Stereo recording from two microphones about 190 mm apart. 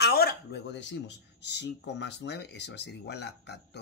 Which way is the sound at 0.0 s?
55° left (ahead or behind).